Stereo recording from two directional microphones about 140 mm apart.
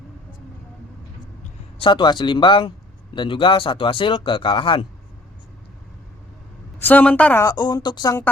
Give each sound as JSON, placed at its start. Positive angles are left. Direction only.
{"t": 1.8, "sound": "speech", "side_deg": 35}
{"t": 6.8, "sound": "a woman's voice", "side_deg": 10}
{"t": 7.4, "sound": "speech", "side_deg": 30}